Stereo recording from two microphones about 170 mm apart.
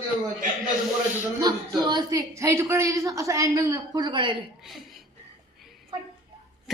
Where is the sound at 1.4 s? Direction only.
25° right (ahead or behind).